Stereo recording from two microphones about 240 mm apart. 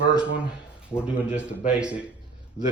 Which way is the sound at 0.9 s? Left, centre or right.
Centre.